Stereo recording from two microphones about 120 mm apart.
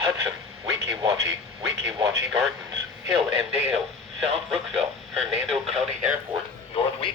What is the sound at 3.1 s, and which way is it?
Speech, centre (ahead or behind).